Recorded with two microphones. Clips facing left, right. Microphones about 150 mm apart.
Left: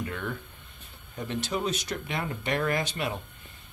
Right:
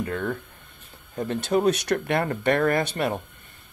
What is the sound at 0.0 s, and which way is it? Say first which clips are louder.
Speech: right 6 dB; 45° right (ahead or behind).